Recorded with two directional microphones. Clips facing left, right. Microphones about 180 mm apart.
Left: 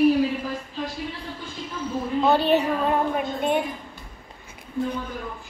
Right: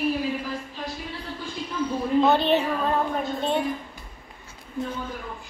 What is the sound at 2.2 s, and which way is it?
Child singing, 10° left (ahead or behind).